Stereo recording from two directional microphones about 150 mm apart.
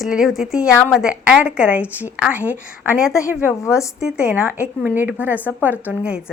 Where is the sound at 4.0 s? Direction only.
5° right (ahead or behind).